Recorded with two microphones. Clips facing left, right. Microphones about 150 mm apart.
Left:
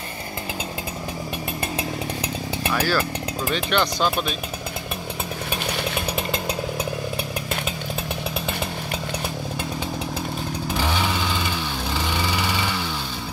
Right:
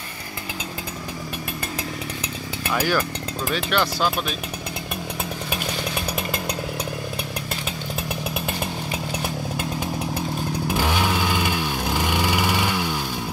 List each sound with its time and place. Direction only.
2.7 s speech: 15° right (ahead or behind)
3.4 s speech: 5° right (ahead or behind)
10.7 s vehicle: 10° right (ahead or behind)